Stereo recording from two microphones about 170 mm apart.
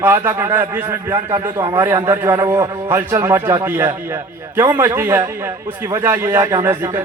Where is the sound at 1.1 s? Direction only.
25° right (ahead or behind).